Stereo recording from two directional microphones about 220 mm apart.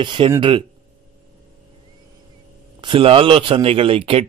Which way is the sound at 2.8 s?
25° right (ahead or behind).